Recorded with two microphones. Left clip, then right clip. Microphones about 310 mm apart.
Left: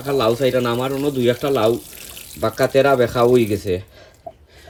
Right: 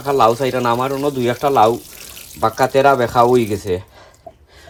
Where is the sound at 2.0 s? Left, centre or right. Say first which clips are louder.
Right 1 dB; centre.